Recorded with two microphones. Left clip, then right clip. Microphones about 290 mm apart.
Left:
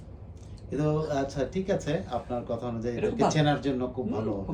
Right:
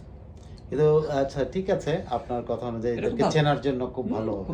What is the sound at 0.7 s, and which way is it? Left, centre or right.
Speech, centre.